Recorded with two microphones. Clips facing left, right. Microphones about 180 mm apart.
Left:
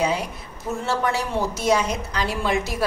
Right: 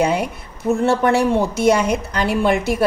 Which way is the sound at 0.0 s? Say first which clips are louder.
Right 5 dB; 60° right (ahead or behind).